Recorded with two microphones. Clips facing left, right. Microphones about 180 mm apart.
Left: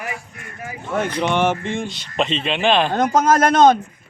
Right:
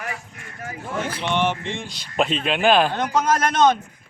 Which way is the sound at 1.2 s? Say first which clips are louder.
Left 4 dB; 45° left (ahead or behind).